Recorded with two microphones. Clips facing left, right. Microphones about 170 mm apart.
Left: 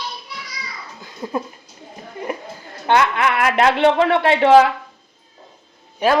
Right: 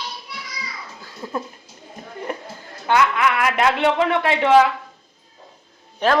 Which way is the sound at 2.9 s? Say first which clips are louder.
Left 1 dB; 35° left (ahead or behind).